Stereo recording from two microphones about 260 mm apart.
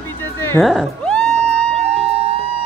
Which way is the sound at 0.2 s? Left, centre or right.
Centre.